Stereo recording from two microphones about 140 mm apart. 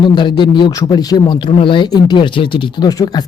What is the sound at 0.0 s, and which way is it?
A man's voice, 35° left (ahead or behind).